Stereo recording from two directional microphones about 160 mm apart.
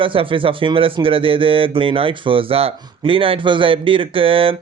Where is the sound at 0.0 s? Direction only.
35° right (ahead or behind).